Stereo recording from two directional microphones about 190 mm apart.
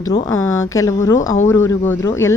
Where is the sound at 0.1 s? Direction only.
15° left (ahead or behind).